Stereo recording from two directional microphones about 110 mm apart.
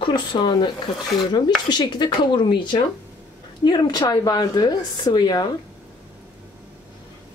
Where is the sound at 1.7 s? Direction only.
40° left (ahead or behind).